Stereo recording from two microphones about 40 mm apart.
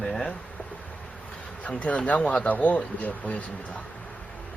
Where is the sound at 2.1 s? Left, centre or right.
Left.